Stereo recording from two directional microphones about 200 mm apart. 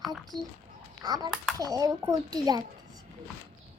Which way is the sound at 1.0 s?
20° right (ahead or behind).